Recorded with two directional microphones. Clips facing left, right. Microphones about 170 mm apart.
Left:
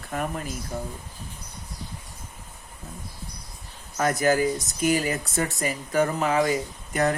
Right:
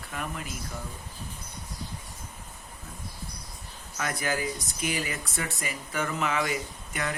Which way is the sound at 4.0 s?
40° left (ahead or behind).